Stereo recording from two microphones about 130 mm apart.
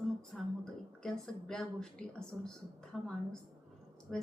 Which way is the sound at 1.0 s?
5° left (ahead or behind).